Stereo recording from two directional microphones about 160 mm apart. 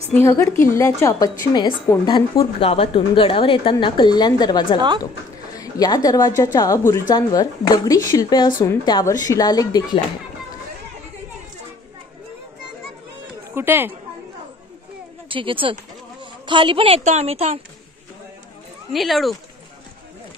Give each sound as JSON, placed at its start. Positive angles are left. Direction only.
{"t": 0.1, "sound": "a woman's voice", "side_deg": 15}
{"t": 13.6, "sound": "a woman's voice", "side_deg": -15}
{"t": 15.2, "sound": "a woman's voice", "side_deg": -30}
{"t": 18.9, "sound": "speech", "side_deg": 0}